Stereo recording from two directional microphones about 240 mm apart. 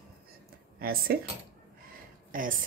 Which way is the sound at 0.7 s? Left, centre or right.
Right.